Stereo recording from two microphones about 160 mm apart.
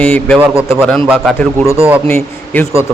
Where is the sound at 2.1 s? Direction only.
15° left (ahead or behind).